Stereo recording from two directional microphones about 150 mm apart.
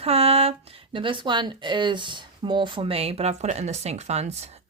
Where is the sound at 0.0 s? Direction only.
40° right (ahead or behind).